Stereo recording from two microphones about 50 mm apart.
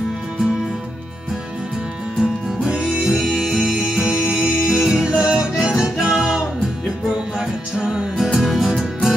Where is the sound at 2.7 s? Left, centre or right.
Right.